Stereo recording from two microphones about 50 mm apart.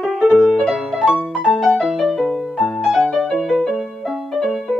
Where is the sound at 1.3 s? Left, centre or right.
Centre.